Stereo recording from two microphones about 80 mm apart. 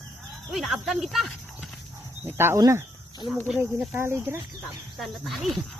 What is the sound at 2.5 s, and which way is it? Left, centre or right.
Speech, right.